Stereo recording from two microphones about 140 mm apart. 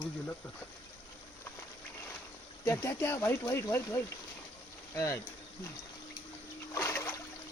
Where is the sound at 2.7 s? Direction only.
20° left (ahead or behind).